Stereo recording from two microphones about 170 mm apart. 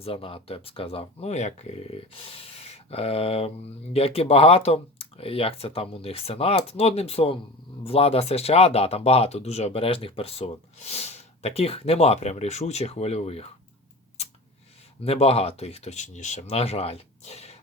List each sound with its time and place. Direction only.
0.0 s speech: 35° left (ahead or behind)
15.0 s speech: 35° left (ahead or behind)